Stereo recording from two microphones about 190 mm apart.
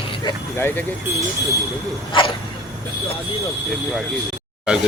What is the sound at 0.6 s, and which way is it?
Speech, 10° left (ahead or behind).